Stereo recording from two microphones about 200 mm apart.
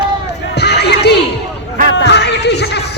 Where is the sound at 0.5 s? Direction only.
55° left (ahead or behind).